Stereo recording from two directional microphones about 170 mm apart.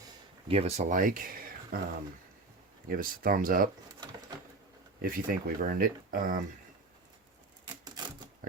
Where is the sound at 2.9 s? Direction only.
55° right (ahead or behind).